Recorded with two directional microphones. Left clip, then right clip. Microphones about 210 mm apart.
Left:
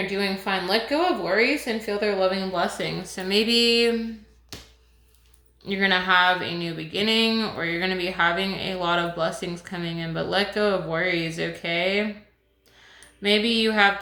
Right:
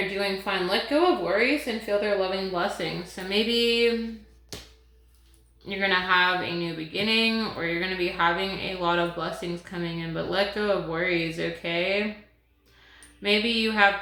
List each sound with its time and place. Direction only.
0.2 s speech: 45° left (ahead or behind)
4.5 s music: 5° left (ahead or behind)
5.6 s speech: 45° left (ahead or behind)
13.2 s speech: 45° left (ahead or behind)